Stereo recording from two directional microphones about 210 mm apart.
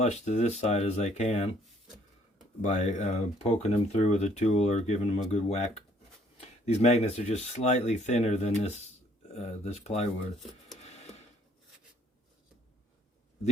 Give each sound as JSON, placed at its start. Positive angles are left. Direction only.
{"t": 0.0, "sound": "speech", "side_deg": 30}
{"t": 2.6, "sound": "speech", "side_deg": 35}